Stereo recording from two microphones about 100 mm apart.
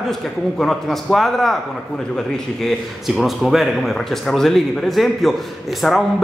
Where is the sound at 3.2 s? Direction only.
Centre (ahead or behind).